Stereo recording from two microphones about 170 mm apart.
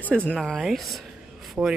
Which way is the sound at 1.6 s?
10° right (ahead or behind).